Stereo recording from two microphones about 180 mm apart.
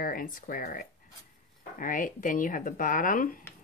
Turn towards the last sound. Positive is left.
turn(degrees=50)  # may be behind; listen again after turning